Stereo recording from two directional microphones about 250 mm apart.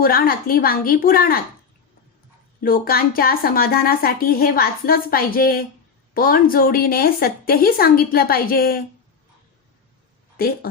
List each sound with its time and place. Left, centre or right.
0.0 s speech: left
2.6 s speech: left
10.3 s speech: left